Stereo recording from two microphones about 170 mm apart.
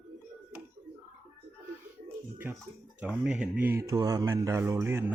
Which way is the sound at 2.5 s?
5° right (ahead or behind).